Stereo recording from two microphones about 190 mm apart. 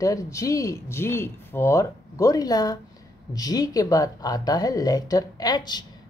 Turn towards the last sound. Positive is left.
turn(degrees=20)  # may be behind; listen again after turning